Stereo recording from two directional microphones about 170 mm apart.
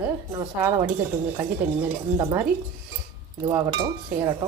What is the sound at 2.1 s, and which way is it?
Cutlery, 25° right (ahead or behind).